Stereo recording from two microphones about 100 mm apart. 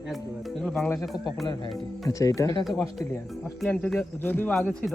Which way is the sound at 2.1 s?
35° left (ahead or behind).